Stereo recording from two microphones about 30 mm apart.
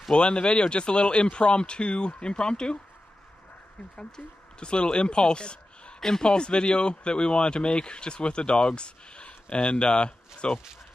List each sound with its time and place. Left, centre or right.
0.1 s speech: left
4.2 s speech: centre
4.6 s speech: left
5.9 s speech: centre
6.3 s speech: left